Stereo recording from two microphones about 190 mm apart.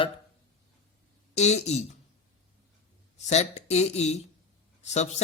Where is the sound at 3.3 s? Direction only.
35° left (ahead or behind).